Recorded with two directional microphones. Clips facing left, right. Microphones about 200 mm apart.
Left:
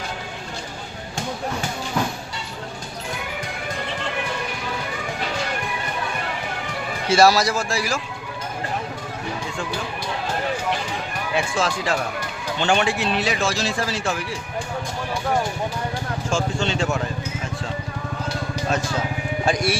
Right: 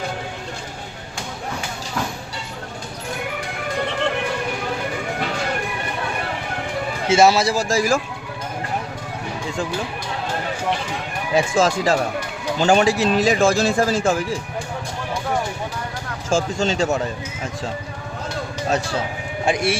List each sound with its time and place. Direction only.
7.1 s a man's voice: 25° right (ahead or behind); by 8.0 s 45° right (ahead or behind)
11.3 s a man's voice: 45° right (ahead or behind)
16.3 s a man's voice: 40° right (ahead or behind)
18.7 s a man's voice: 35° right (ahead or behind)